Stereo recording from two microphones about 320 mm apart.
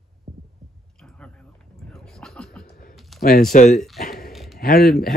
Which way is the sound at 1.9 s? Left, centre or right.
Centre.